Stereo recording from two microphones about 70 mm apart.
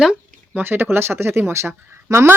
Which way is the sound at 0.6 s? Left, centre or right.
Right.